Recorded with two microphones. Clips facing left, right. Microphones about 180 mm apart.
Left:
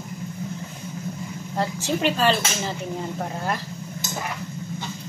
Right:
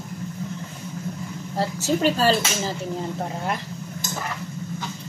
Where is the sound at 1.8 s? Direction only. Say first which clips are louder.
Right 2 dB; 40° right (ahead or behind).